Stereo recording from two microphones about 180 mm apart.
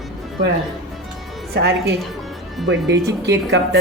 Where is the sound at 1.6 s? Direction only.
70° right (ahead or behind).